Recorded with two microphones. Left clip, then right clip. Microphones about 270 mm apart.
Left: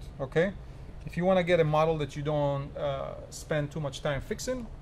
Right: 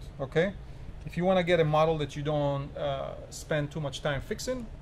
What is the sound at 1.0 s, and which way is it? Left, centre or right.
Speech, centre.